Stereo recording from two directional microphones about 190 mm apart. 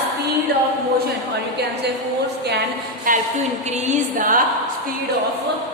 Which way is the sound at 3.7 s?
40° right (ahead or behind).